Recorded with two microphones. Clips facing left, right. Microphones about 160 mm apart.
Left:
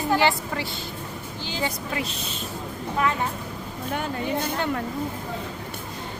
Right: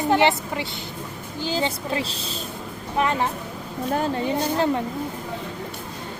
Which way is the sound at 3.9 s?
30° right (ahead or behind).